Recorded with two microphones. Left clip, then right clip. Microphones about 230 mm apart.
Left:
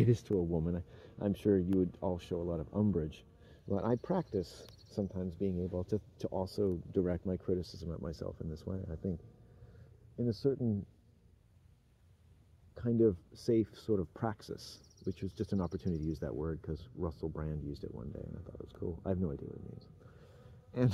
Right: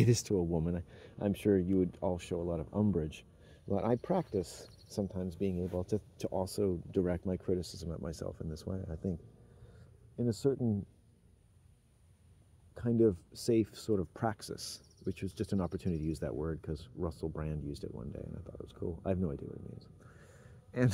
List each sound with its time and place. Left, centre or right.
0.0 s speech: centre
10.1 s speech: centre
12.7 s speech: centre